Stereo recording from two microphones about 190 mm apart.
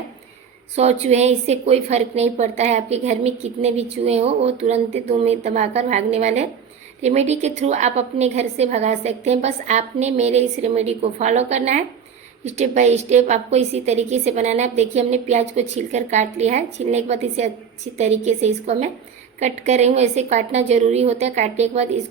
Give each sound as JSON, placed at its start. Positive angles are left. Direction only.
{"t": 0.8, "sound": "a woman's voice", "side_deg": -35}